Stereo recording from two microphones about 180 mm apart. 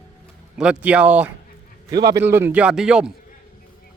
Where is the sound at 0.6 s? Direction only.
5° right (ahead or behind).